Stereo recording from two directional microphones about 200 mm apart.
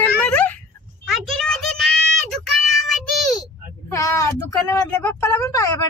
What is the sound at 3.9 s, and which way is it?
Speech, 15° left (ahead or behind).